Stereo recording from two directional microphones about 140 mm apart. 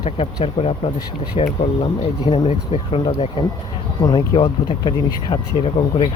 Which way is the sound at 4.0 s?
30° left (ahead or behind).